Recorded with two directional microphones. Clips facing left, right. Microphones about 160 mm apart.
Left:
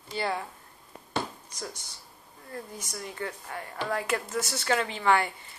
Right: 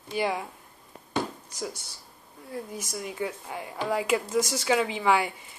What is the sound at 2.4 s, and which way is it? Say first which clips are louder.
Speech: right 4 dB; 10° right (ahead or behind).